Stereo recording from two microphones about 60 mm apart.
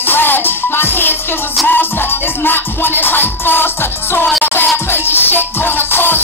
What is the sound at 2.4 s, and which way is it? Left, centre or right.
Music, left.